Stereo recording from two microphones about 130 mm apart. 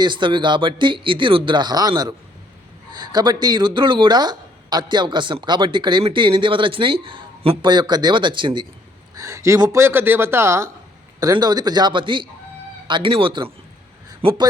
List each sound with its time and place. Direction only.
0.0 s speech: 40° right (ahead or behind)
9.1 s a man's voice: 25° right (ahead or behind); by 14.4 s 45° right (ahead or behind)